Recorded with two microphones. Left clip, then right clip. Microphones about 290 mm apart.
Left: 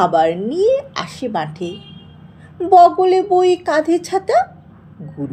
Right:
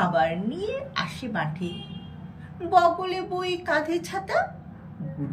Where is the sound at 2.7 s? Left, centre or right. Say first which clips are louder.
Left 11 dB; centre.